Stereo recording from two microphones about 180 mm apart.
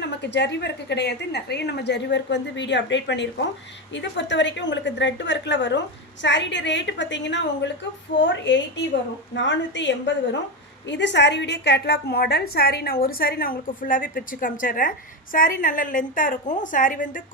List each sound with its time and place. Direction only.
0.0 s a woman's voice: 70° left (ahead or behind); by 17.2 s 45° left (ahead or behind)